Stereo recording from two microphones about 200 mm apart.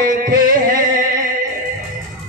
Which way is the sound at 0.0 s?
45° right (ahead or behind).